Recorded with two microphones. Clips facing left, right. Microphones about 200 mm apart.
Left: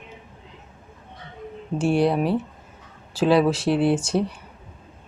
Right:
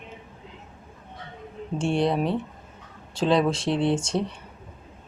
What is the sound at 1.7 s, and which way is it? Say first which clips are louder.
Speech: left 3 dB; 5° left (ahead or behind).